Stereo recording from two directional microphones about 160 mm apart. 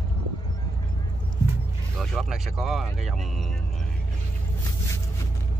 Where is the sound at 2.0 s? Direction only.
Centre (ahead or behind).